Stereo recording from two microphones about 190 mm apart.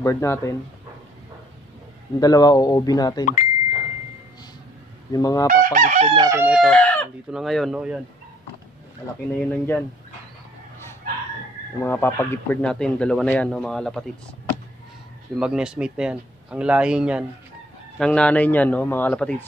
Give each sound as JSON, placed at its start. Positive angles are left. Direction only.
{"t": 0.0, "sound": "a man's voice", "side_deg": 15}
{"t": 2.1, "sound": "speech", "side_deg": 20}
{"t": 5.1, "sound": "speech", "side_deg": 20}
{"t": 5.5, "sound": "chicken", "side_deg": -45}
{"t": 6.1, "sound": "crowing", "side_deg": -15}
{"t": 6.5, "sound": "chicken", "side_deg": 0}
{"t": 7.2, "sound": "a man's voice", "side_deg": 0}
{"t": 9.3, "sound": "a man's voice", "side_deg": 5}
{"t": 11.8, "sound": "a man's voice", "side_deg": 10}
{"t": 15.3, "sound": "a man's voice", "side_deg": -5}